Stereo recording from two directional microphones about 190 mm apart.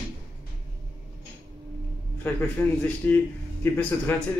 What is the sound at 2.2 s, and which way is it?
A man's voice, 10° left (ahead or behind).